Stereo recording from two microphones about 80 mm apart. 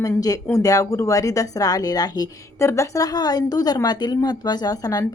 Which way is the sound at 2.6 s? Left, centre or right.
Left.